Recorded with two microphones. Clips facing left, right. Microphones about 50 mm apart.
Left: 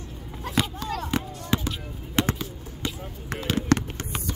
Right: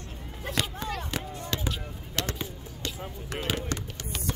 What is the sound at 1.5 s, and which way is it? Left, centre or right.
Basketball bounce, left.